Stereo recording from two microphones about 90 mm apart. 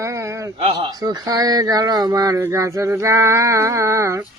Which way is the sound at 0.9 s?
45° right (ahead or behind).